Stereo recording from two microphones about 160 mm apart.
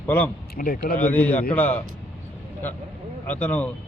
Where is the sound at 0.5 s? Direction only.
65° left (ahead or behind).